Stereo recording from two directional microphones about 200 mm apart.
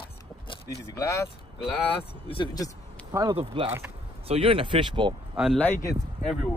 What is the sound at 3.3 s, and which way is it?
Speech, 25° right (ahead or behind).